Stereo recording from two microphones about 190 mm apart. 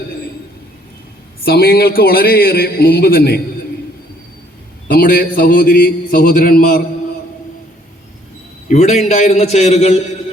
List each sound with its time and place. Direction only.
1.5 s a man's voice: 55° left (ahead or behind)
4.9 s a man's voice: 50° left (ahead or behind)
8.6 s a man's voice: 35° left (ahead or behind)